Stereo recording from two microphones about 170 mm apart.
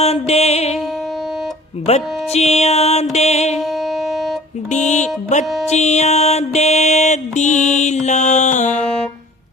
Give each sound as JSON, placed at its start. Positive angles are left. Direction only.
{"t": 0.0, "sound": "music", "side_deg": 40}
{"t": 1.9, "sound": "music", "side_deg": 40}
{"t": 3.6, "sound": "music", "side_deg": 0}
{"t": 4.7, "sound": "mantra", "side_deg": 45}
{"t": 5.6, "sound": "music", "side_deg": 40}
{"t": 8.0, "sound": "mantra", "side_deg": 45}